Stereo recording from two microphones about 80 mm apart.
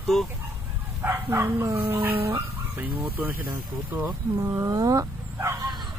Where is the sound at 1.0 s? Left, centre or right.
Right.